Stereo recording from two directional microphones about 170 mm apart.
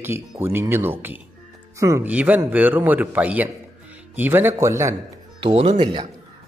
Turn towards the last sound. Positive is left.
turn(degrees=-25)  # may be behind; listen again after turning